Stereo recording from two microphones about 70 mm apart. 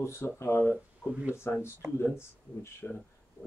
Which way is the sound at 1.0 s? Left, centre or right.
Right.